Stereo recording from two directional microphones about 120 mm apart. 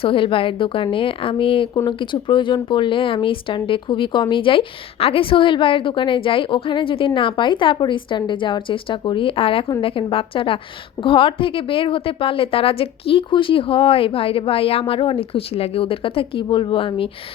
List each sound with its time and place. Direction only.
0.0 s speech: 45° left (ahead or behind)